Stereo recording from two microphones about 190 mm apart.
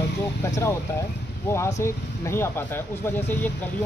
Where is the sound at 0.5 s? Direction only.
15° left (ahead or behind).